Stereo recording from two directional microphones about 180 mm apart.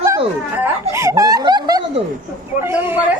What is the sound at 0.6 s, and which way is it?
Snicker, 15° right (ahead or behind).